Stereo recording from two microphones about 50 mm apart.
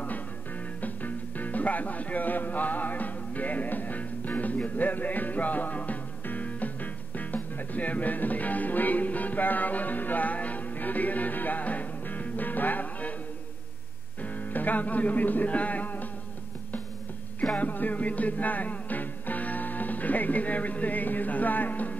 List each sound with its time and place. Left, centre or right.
0.7 s music: left
14.2 s speech: left
17.6 s music: left